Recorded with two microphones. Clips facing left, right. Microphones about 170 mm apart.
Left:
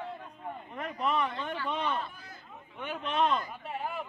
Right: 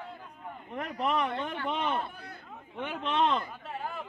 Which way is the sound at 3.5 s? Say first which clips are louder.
Left 1 dB; 10° left (ahead or behind).